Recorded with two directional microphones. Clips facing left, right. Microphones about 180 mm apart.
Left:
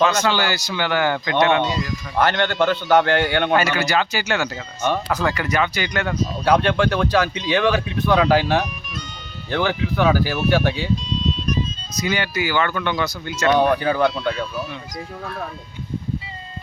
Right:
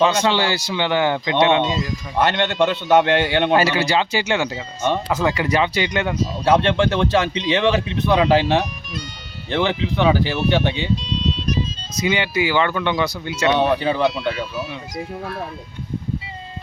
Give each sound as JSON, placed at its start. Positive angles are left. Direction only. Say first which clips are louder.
{"t": 0.0, "sound": "speech", "louder": "right 1 dB", "side_deg": -30}
{"t": 11.9, "sound": "speech", "louder": "right 3 dB", "side_deg": -25}